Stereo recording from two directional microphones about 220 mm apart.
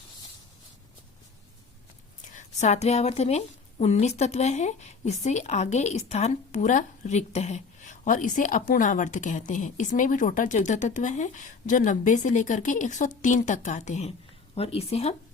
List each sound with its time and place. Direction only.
2.2 s a woman's voice: 35° left (ahead or behind)